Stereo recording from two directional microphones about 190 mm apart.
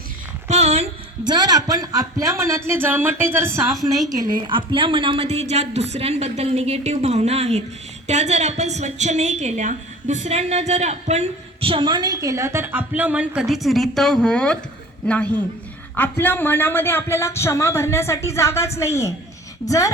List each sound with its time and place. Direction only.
0.4 s a woman's voice: 35° right (ahead or behind); by 3.6 s 10° right (ahead or behind)
4.4 s a woman's voice: 25° right (ahead or behind); by 19.9 s 20° left (ahead or behind)